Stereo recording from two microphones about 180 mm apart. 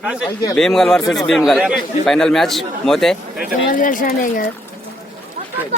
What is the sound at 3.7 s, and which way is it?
Speech, 50° left (ahead or behind).